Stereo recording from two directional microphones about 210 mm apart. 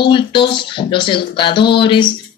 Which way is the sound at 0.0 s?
25° left (ahead or behind).